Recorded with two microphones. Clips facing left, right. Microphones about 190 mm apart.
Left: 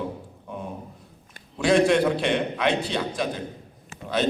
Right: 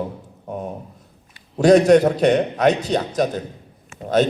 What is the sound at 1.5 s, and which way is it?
A man's voice, 40° right (ahead or behind).